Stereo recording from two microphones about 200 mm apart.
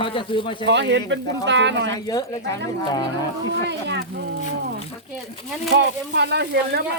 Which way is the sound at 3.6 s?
60° right (ahead or behind).